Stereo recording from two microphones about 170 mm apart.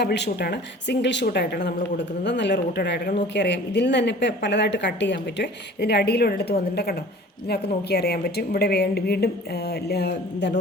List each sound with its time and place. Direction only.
0.0 s a woman's voice: 80° left